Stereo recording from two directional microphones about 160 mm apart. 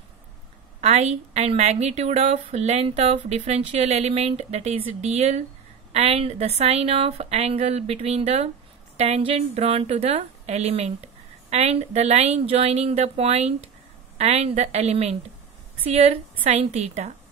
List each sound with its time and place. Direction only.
0.7 s a woman's voice: 45° right (ahead or behind)